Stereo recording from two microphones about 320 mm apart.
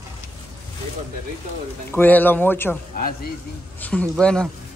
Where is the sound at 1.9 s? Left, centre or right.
Centre.